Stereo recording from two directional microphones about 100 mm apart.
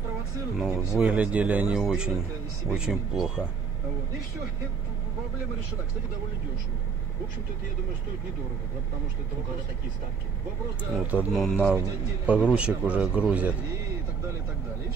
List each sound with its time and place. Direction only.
0.6 s speech: centre (ahead or behind)
1.0 s a man's voice: 15° right (ahead or behind)
10.8 s a man's voice: 15° right (ahead or behind)
11.3 s speech: 5° left (ahead or behind)
12.5 s a man's voice: 10° right (ahead or behind)